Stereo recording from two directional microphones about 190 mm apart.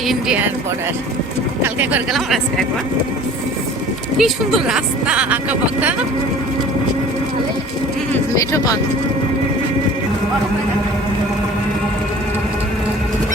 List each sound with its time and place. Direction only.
0.1 s speech: 5° right (ahead or behind)
1.6 s speech: 10° right (ahead or behind)
4.2 s speech: centre (ahead or behind)
8.4 s speech: 15° left (ahead or behind)